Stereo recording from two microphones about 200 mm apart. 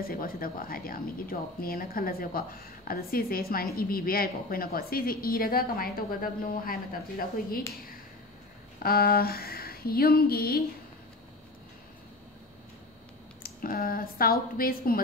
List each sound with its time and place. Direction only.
0.0 s a woman's voice: 45° left (ahead or behind)
8.8 s a woman's voice: 50° left (ahead or behind)
13.4 s a woman's voice: 45° left (ahead or behind)